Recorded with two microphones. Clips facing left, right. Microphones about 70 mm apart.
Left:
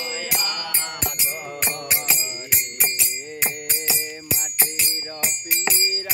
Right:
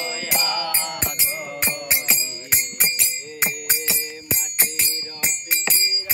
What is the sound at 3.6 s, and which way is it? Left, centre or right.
Music, right.